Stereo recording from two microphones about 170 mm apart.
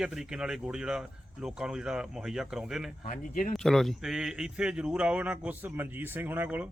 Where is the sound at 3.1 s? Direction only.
50° left (ahead or behind).